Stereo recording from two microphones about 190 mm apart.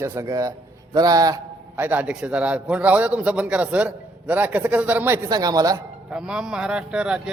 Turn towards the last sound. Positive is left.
turn(degrees=-5)  # may be behind; listen again after turning